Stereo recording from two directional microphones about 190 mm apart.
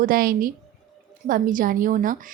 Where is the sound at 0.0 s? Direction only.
50° right (ahead or behind).